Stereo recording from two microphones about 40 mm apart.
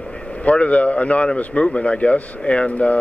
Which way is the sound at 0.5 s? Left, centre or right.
Left.